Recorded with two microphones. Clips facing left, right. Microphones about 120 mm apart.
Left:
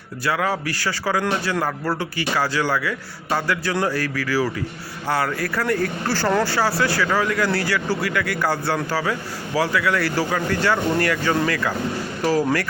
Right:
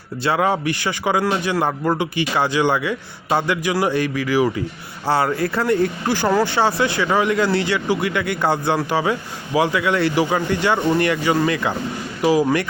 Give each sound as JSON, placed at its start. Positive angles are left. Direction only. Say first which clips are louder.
{"t": 0.3, "sound": "a man's voice", "louder": "right 4 dB", "side_deg": -25}